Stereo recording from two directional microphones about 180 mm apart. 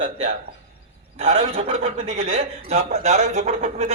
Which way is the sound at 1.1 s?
35° right (ahead or behind).